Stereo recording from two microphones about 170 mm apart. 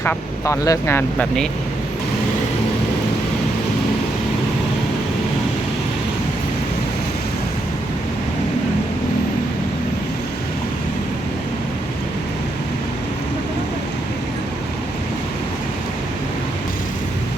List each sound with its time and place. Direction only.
0.0 s speech: 15° left (ahead or behind)